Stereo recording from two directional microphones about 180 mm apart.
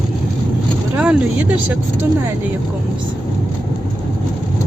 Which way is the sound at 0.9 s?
5° right (ahead or behind).